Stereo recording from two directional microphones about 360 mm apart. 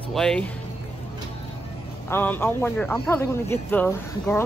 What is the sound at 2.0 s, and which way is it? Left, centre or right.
Speech, centre.